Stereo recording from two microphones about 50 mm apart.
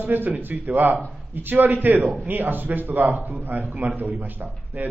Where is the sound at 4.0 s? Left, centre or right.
Right.